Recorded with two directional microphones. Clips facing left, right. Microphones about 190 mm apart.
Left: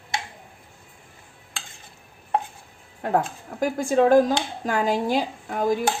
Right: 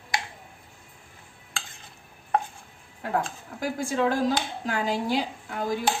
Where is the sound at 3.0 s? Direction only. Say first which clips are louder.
Left 5 dB; 45° left (ahead or behind).